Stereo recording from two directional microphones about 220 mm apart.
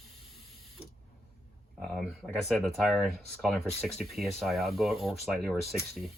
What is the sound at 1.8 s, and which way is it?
Speech, centre (ahead or behind).